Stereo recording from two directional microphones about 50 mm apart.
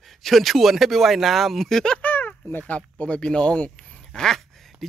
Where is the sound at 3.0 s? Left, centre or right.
Left.